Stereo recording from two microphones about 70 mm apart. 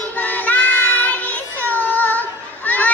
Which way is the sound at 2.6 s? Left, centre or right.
Left.